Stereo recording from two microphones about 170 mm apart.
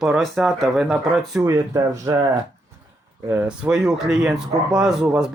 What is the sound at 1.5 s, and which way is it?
Speech, 20° right (ahead or behind).